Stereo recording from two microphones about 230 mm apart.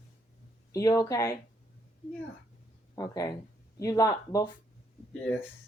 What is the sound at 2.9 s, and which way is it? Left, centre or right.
Speech, centre.